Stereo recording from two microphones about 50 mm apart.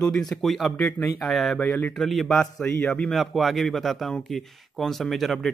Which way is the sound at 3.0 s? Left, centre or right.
Centre.